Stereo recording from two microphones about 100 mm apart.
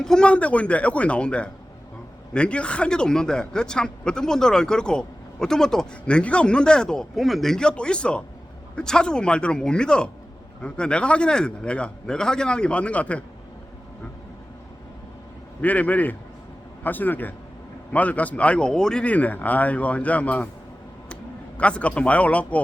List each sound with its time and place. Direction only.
0.0 s speech: 5° left (ahead or behind)
15.6 s speech: 15° left (ahead or behind)
21.6 s speech: 10° left (ahead or behind)